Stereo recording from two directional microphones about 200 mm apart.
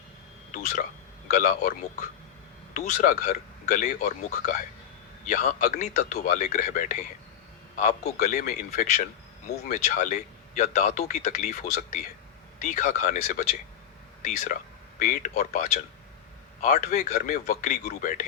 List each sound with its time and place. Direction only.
0.5 s speech: 40° left (ahead or behind)
5.2 s speech: 35° left (ahead or behind)